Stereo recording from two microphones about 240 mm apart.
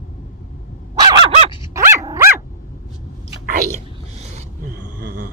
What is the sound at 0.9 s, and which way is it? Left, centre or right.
Dog, centre.